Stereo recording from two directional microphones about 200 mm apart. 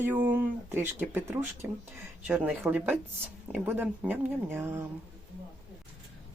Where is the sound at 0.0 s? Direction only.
10° right (ahead or behind).